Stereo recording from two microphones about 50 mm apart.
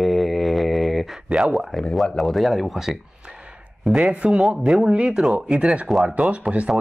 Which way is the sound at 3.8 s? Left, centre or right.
Centre.